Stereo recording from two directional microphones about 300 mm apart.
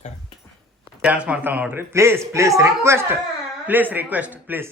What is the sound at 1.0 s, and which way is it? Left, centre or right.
Speech, centre.